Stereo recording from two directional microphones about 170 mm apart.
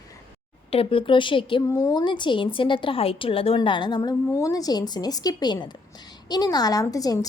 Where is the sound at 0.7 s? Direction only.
35° left (ahead or behind).